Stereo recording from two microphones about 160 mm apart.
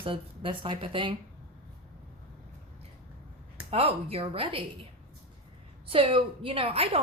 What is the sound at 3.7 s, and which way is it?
Speech, 40° right (ahead or behind).